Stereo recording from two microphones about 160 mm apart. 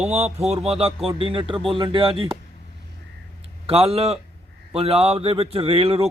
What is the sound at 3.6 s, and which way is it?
Speech, 35° right (ahead or behind).